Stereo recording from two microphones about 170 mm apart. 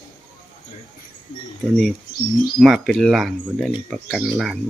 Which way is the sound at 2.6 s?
Centre (ahead or behind).